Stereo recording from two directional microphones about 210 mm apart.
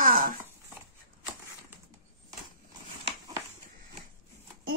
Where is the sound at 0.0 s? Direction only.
40° right (ahead or behind).